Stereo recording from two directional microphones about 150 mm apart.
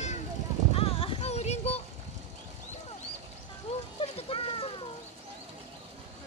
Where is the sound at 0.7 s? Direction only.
40° left (ahead or behind).